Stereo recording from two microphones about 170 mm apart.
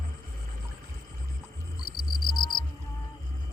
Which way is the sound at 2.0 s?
60° left (ahead or behind).